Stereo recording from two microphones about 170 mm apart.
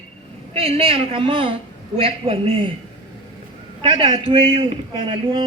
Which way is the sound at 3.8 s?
30° right (ahead or behind).